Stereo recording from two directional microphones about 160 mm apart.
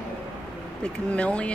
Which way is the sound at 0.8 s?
10° left (ahead or behind).